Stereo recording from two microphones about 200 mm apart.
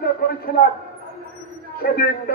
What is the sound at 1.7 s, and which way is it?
Speech, 50° left (ahead or behind).